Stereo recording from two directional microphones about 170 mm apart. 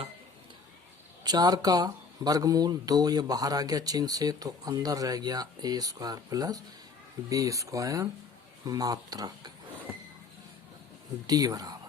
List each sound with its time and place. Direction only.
1.2 s speech: 25° right (ahead or behind)
11.3 s speech: 20° right (ahead or behind)